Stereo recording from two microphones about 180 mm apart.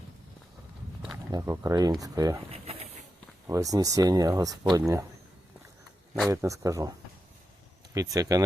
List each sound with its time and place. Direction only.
1.3 s speech: 20° right (ahead or behind)
3.4 s speech: 20° right (ahead or behind)
6.3 s speech: 15° right (ahead or behind)
7.9 s speech: 20° right (ahead or behind)